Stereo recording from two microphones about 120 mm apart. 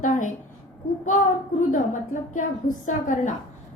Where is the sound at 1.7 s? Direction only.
90° left.